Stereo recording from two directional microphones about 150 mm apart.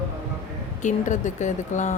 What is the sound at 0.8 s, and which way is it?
A woman's voice, 55° left (ahead or behind).